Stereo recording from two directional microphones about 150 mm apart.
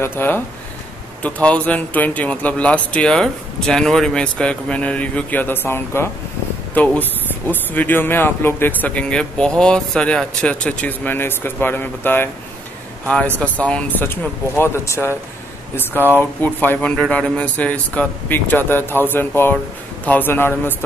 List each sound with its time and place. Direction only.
0.0 s speech: 15° left (ahead or behind)